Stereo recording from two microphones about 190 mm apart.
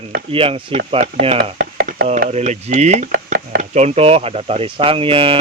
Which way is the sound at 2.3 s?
35° right (ahead or behind).